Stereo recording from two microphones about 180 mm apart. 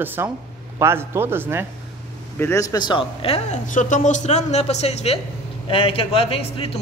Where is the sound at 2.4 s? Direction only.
15° left (ahead or behind); by 6.7 s 30° left (ahead or behind).